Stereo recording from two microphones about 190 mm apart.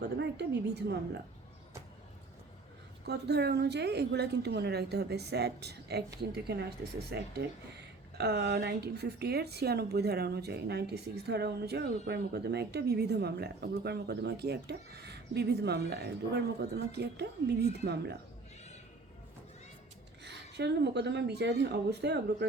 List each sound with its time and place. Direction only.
0.0 s speech: 60° right (ahead or behind)
3.1 s speech: 60° right (ahead or behind)
20.2 s speech: 65° right (ahead or behind)